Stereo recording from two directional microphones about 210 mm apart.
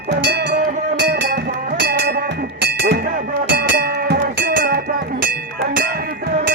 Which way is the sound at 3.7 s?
40° right (ahead or behind).